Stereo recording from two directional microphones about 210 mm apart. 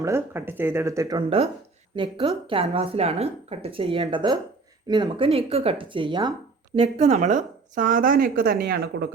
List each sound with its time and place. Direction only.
0.0 s a woman's voice: 10° right (ahead or behind); by 9.0 s 50° right (ahead or behind)